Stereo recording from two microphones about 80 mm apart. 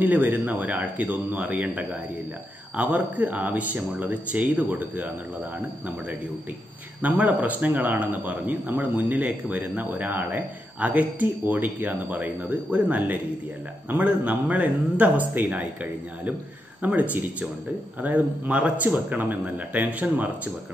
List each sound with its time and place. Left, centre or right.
0.0 s speech: right
7.0 s speech: centre